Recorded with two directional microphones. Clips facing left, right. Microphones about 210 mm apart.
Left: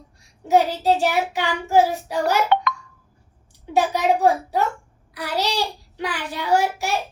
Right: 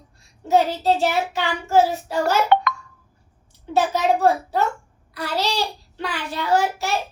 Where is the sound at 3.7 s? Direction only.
15° left (ahead or behind).